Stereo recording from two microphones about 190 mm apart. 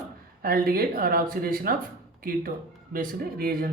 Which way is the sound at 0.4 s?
50° right (ahead or behind).